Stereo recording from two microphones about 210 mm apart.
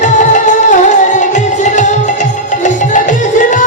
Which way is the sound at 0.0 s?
35° left (ahead or behind).